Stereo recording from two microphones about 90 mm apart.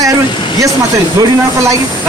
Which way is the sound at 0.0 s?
40° right (ahead or behind).